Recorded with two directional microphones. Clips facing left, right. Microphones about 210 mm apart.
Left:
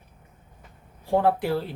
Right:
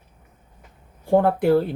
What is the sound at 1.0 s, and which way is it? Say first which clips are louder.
Speech: right 5 dB; 55° right (ahead or behind).